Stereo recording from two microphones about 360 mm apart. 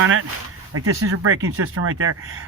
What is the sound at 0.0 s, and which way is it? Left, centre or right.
Speech, right.